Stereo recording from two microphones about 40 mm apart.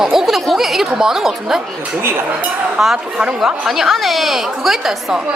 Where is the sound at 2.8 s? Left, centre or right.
Centre.